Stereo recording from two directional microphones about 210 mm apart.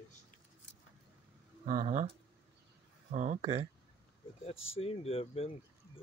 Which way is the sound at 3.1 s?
35° right (ahead or behind).